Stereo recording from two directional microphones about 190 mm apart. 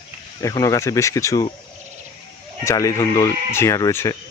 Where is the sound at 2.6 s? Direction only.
15° left (ahead or behind).